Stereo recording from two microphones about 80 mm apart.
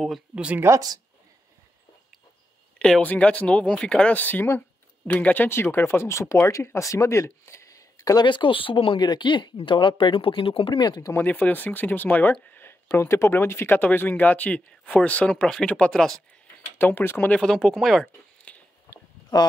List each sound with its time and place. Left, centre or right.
0.7 s speech: right
3.0 s speech: centre; by 8.2 s left
8.2 s speech: left
11.1 s speech: left
16.6 s speech: left
17.3 s speech: centre
18.5 s a sound: centre